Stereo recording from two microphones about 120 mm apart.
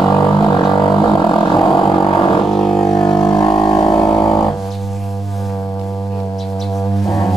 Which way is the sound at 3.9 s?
5° left (ahead or behind).